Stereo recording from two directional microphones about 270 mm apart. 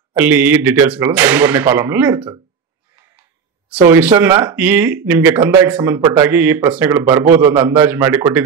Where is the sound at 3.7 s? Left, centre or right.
Centre.